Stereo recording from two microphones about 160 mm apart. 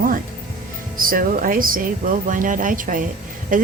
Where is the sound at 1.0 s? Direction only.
60° right (ahead or behind).